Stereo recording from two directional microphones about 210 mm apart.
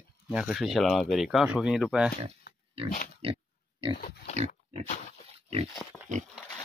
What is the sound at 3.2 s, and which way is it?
Pig, 25° right (ahead or behind).